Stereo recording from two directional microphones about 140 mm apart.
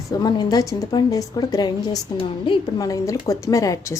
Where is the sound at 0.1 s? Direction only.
30° left (ahead or behind).